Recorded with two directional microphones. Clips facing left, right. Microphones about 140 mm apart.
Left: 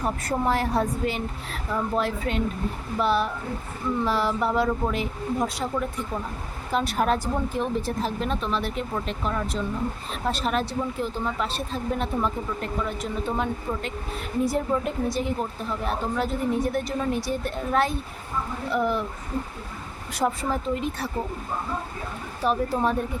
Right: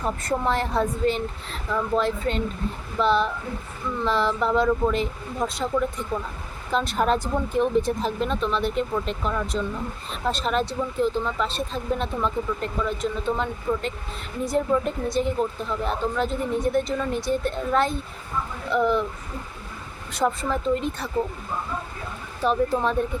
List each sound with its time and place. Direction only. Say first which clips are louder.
0.0 s a woman's voice: even; 10° left (ahead or behind)
20.1 s speech: right 1 dB; 10° left (ahead or behind)
22.4 s a woman's voice: right 2 dB; 5° left (ahead or behind)